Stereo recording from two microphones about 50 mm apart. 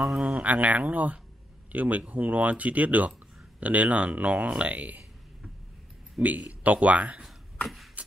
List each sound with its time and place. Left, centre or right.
0.0 s speech: centre
0.4 s speech: right
6.2 s speech: right
7.6 s a sound: centre